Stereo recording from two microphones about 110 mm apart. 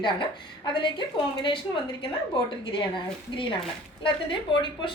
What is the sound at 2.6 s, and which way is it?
A woman's voice, 45° left (ahead or behind).